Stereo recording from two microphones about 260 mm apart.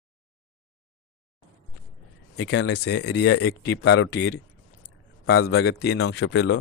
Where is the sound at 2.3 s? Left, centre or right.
Left.